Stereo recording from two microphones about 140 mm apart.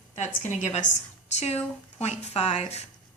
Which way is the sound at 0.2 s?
55° left (ahead or behind).